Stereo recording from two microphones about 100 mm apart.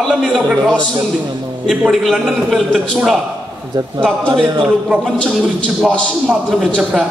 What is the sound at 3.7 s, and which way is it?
Speech, 45° right (ahead or behind).